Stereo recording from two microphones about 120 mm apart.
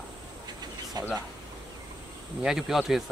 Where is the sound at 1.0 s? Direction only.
35° right (ahead or behind).